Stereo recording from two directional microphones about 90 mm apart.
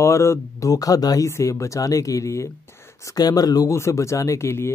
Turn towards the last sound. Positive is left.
turn(degrees=30)  # may be behind; listen again after turning